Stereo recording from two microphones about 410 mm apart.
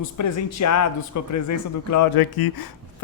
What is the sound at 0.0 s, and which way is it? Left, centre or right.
Speech, left.